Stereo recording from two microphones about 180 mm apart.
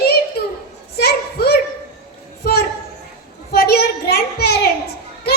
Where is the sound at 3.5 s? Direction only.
60° left (ahead or behind).